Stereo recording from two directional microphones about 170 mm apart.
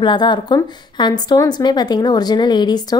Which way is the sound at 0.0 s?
25° left (ahead or behind).